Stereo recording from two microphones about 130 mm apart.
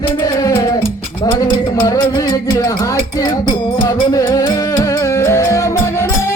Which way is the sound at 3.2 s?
30° left (ahead or behind).